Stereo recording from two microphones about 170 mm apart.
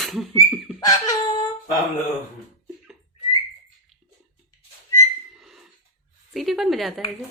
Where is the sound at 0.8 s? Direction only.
20° left (ahead or behind).